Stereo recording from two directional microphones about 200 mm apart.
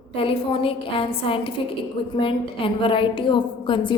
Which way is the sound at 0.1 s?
25° left (ahead or behind).